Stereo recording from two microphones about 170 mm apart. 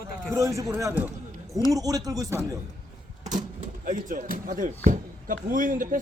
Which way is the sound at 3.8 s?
50° right (ahead or behind).